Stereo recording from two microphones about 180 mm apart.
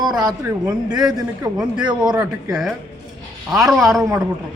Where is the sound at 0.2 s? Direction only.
20° right (ahead or behind).